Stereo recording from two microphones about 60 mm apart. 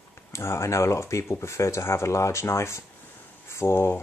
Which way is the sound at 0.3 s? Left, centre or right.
Left.